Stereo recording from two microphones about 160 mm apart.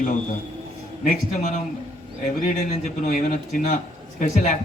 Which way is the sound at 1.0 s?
55° left (ahead or behind).